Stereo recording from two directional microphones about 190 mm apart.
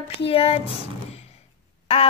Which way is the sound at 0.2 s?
30° left (ahead or behind).